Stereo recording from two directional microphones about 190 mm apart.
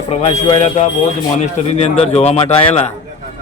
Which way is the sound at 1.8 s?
35° left (ahead or behind).